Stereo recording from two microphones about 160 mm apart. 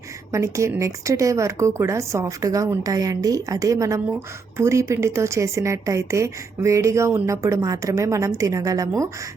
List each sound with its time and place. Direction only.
0.3 s a woman's voice: 20° right (ahead or behind)